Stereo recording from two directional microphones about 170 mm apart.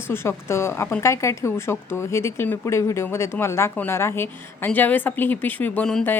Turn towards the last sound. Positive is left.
turn(degrees=5)  # may be behind; listen again after turning